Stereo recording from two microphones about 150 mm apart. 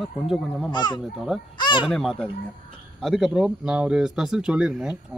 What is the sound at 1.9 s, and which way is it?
Speech, 5° left (ahead or behind).